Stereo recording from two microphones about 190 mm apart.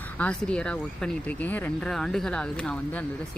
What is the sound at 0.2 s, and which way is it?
Speech, 5° left (ahead or behind).